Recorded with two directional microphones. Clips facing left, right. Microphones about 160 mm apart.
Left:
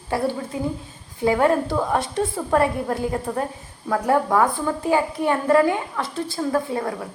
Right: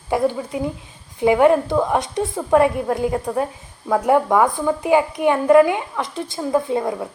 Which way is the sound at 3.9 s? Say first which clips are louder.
Right 3 dB; 15° right (ahead or behind).